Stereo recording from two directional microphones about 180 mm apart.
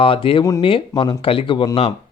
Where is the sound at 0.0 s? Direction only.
30° left (ahead or behind).